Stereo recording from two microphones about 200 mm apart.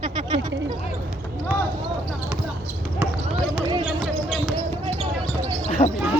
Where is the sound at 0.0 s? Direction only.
25° right (ahead or behind).